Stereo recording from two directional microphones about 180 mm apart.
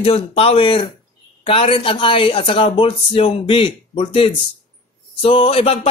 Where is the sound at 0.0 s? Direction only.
35° left (ahead or behind).